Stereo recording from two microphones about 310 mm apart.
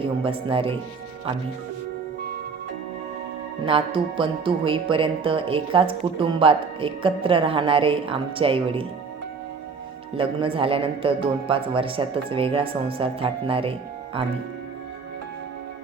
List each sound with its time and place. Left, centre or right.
0.0 s speech: centre
3.7 s speech: centre
10.2 s speech: centre